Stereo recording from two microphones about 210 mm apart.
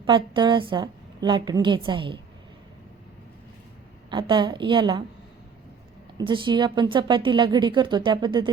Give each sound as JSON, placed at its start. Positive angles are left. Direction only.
{"t": 0.0, "sound": "a woman's voice", "side_deg": -20}
{"t": 4.1, "sound": "a woman's voice", "side_deg": -20}
{"t": 6.1, "sound": "a woman's voice", "side_deg": -20}